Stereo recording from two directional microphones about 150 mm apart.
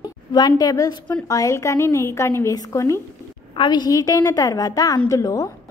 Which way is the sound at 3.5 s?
30° left (ahead or behind).